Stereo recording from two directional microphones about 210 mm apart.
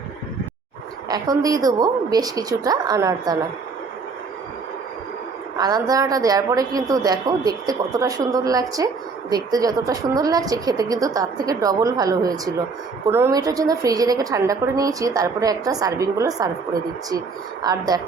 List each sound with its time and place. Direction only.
1.1 s a woman's voice: 20° right (ahead or behind)
5.5 s a woman's voice: 20° right (ahead or behind)
17.6 s a woman's voice: 20° right (ahead or behind)